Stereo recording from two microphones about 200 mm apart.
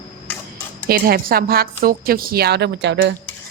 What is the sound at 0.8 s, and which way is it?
Speech, 50° right (ahead or behind).